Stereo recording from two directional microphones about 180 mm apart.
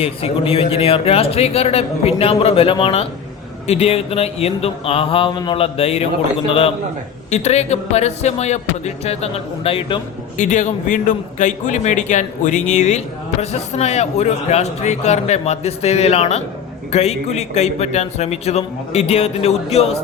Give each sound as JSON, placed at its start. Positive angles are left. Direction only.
{"t": 0.0, "sound": "speech", "side_deg": 30}
{"t": 10.4, "sound": "a man's voice", "side_deg": 45}